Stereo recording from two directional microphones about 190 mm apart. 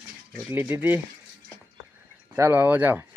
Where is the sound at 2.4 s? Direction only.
10° right (ahead or behind).